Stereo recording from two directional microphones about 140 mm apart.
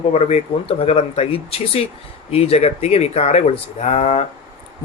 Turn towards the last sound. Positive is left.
turn(degrees=50)  # may be behind; listen again after turning